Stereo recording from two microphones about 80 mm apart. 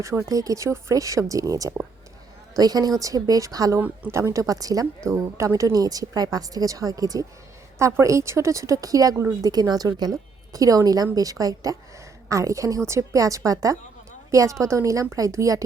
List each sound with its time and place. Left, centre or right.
0.0 s a woman's voice: right
5.0 s a woman's voice: right
7.8 s a woman's voice: right